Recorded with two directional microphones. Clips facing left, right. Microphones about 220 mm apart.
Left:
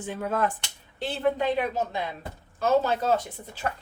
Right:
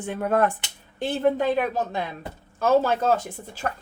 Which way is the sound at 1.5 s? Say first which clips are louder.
Right 2 dB; 45° right (ahead or behind).